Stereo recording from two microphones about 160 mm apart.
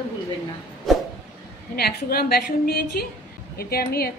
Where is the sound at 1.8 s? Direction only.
75° left (ahead or behind).